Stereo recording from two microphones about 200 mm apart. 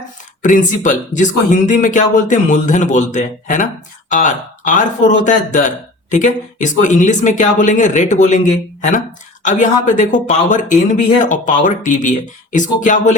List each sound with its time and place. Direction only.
0.4 s speech: 40° left (ahead or behind)